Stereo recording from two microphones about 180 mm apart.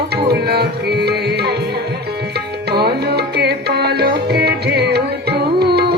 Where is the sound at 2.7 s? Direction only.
60° right (ahead or behind).